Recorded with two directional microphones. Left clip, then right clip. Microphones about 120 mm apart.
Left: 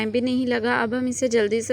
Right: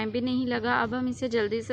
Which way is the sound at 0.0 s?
35° left (ahead or behind).